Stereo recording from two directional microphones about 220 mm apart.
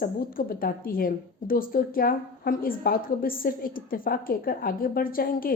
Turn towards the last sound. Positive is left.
turn(degrees=40)  # may be behind; listen again after turning